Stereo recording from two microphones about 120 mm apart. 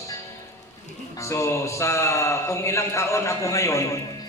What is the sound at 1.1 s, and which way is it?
A man's voice, 25° left (ahead or behind).